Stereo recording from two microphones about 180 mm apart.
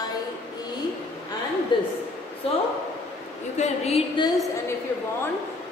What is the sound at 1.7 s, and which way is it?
Speech, 25° left (ahead or behind).